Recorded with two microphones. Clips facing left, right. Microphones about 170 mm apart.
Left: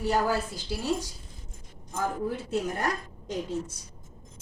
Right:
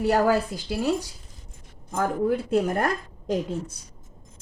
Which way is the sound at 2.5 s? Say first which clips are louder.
Right 6 dB; 55° right (ahead or behind).